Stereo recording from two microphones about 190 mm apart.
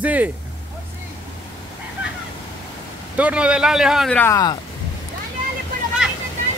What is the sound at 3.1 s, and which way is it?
A man's voice, 5° right (ahead or behind).